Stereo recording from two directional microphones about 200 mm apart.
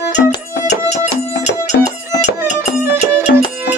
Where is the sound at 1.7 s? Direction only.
55° left (ahead or behind).